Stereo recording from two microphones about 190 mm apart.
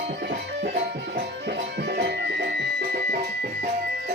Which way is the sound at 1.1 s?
55° right (ahead or behind).